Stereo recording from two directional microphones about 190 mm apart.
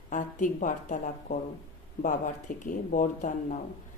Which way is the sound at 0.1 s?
45° left (ahead or behind).